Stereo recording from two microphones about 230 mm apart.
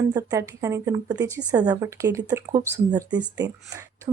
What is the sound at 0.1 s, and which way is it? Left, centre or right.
Speech, centre.